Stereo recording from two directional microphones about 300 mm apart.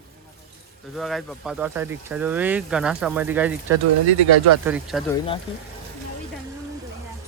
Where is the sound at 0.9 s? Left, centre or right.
Centre.